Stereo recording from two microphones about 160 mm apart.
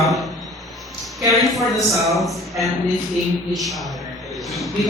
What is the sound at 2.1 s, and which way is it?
Speech, centre (ahead or behind).